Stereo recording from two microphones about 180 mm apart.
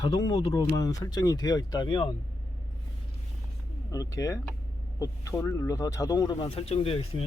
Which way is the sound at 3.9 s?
20° left (ahead or behind).